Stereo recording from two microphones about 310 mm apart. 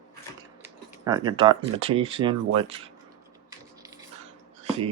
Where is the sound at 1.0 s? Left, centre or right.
Centre.